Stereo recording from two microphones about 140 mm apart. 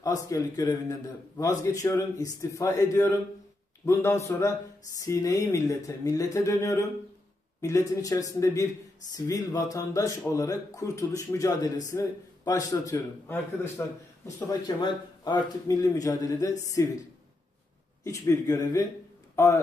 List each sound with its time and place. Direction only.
0.0 s a man's voice: 25° left (ahead or behind)
7.9 s a man's voice: 25° left (ahead or behind)
18.0 s a man's voice: 20° left (ahead or behind)